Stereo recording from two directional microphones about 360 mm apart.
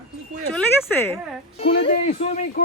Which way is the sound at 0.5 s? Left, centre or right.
Centre.